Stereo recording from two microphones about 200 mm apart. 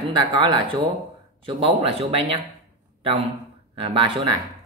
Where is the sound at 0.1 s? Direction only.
25° right (ahead or behind).